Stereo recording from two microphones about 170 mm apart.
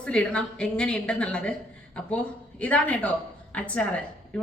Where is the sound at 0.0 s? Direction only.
5° left (ahead or behind).